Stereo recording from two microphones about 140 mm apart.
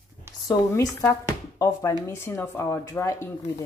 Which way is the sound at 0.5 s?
20° left (ahead or behind).